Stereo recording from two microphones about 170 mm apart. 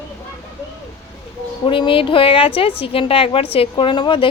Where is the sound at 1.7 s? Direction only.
30° left (ahead or behind).